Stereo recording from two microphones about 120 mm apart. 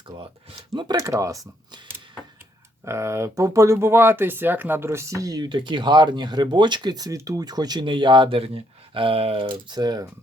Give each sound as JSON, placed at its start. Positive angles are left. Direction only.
{"t": 0.9, "sound": "speech", "side_deg": -25}